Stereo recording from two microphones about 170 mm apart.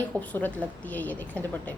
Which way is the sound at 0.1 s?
10° left (ahead or behind).